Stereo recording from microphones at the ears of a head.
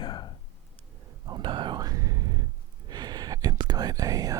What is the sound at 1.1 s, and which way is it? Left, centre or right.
Whispering, right.